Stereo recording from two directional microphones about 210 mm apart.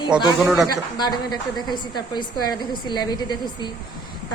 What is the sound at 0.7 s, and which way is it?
A woman's voice, 20° left (ahead or behind).